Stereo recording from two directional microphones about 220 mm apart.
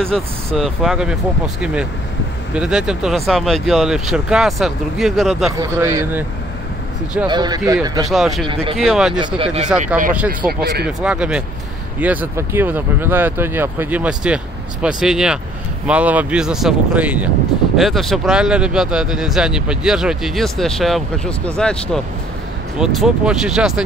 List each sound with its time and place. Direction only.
0.1 s speech: centre (ahead or behind)
5.8 s speech: 10° right (ahead or behind)
7.2 s speech: 20° right (ahead or behind)
8.1 s speech: centre (ahead or behind)
8.5 s speech: 25° right (ahead or behind)
8.7 s speech: centre (ahead or behind)
9.4 s speech: 30° right (ahead or behind)
9.9 s speech: 5° right (ahead or behind)
10.4 s speech: 45° right (ahead or behind)
10.9 s speech: 5° right (ahead or behind)